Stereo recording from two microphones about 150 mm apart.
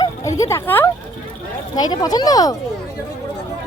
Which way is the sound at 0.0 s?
20° left (ahead or behind).